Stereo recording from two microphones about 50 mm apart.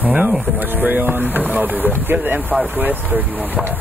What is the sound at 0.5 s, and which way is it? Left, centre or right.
Speech, right.